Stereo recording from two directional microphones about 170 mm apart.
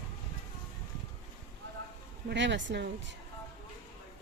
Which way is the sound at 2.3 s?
90° right.